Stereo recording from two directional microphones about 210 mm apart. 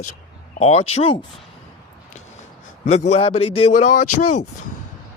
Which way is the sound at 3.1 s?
25° left (ahead or behind).